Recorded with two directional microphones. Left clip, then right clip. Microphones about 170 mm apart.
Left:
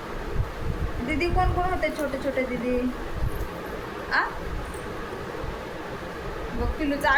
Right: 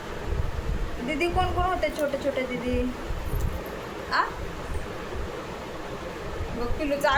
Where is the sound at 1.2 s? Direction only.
5° right (ahead or behind).